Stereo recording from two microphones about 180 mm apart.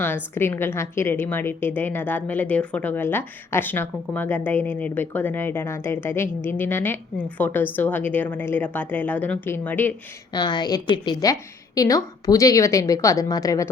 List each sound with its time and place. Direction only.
0.3 s a woman's voice: 10° left (ahead or behind)
10.3 s a woman's voice: 25° left (ahead or behind)